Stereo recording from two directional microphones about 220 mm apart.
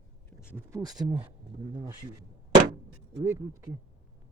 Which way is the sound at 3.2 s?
15° right (ahead or behind).